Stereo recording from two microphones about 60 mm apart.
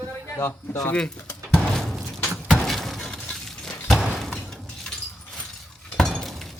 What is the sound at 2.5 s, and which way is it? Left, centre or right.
Shatter, centre.